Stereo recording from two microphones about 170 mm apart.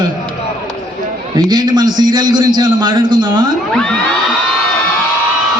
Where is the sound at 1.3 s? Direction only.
25° right (ahead or behind).